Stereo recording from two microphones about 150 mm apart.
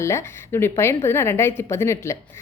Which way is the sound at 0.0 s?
20° left (ahead or behind).